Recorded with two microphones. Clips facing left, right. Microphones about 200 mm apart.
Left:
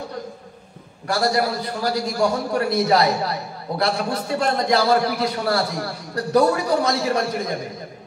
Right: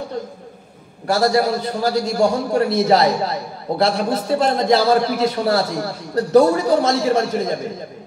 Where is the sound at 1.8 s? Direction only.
25° right (ahead or behind).